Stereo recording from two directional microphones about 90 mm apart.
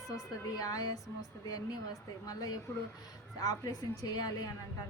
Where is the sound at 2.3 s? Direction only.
45° left (ahead or behind).